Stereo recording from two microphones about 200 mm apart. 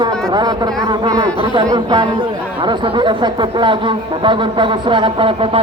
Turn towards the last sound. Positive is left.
turn(degrees=-25)  # may be behind; listen again after turning